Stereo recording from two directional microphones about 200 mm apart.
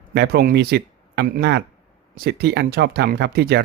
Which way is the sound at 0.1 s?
55° right (ahead or behind).